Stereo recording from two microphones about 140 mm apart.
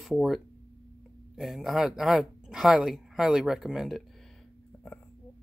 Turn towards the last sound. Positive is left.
turn(degrees=0)  # may be behind; listen again after turning